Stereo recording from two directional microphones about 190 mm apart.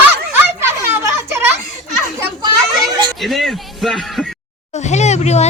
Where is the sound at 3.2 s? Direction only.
Centre (ahead or behind).